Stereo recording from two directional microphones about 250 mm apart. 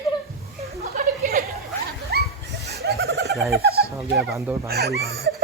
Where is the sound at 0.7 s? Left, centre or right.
Right.